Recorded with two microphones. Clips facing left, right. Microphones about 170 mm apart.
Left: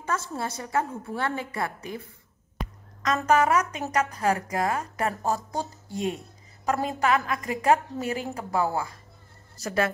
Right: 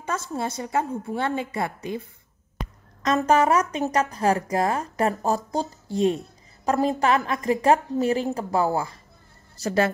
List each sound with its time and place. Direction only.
0.0 s a woman's voice: 20° right (ahead or behind)
3.0 s a woman's voice: 30° right (ahead or behind)